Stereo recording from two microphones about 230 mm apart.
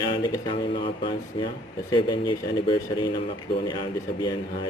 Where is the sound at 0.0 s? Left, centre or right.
Left.